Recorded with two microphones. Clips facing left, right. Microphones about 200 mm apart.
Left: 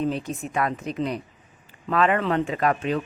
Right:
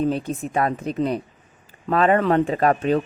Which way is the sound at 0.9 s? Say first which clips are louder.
Right 4 dB; 35° right (ahead or behind).